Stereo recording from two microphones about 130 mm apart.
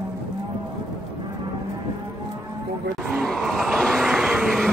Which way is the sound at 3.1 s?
Centre (ahead or behind).